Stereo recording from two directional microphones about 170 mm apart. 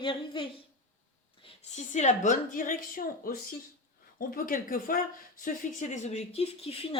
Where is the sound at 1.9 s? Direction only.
45° left (ahead or behind).